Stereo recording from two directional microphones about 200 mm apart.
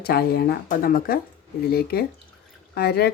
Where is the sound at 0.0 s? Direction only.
50° left (ahead or behind).